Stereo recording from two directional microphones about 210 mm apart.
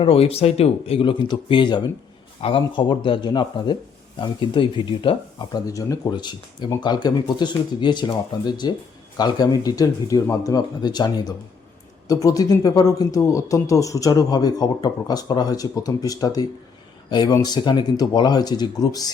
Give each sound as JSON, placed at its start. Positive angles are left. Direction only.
{"t": 0.0, "sound": "speech", "side_deg": 25}